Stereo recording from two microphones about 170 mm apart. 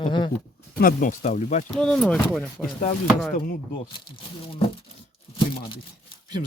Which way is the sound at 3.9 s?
30° left (ahead or behind).